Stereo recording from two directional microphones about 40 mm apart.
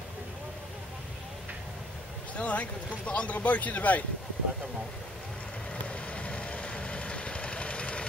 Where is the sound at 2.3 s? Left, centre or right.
Left.